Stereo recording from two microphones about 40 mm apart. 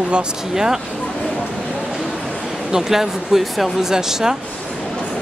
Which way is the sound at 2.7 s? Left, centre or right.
Centre.